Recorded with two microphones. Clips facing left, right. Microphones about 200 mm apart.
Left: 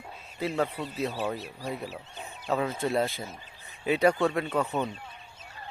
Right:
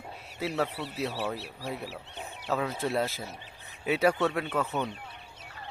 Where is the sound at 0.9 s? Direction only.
70° right (ahead or behind).